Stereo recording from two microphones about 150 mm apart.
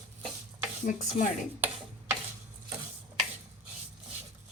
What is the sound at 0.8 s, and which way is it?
Speech, 60° left (ahead or behind).